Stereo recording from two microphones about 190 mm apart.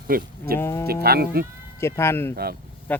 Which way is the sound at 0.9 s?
55° right (ahead or behind).